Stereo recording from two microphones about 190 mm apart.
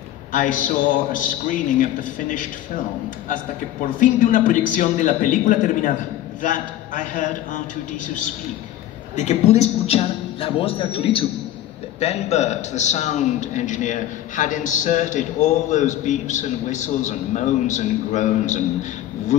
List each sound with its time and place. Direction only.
0.3 s a man's voice: 45° left (ahead or behind)
4.0 s a man's voice: 45° left (ahead or behind)
9.1 s a man's voice: 40° left (ahead or behind)